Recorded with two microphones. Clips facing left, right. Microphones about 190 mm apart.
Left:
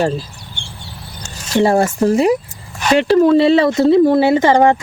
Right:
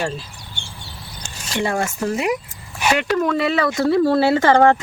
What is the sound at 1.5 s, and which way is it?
Speech, 35° left (ahead or behind).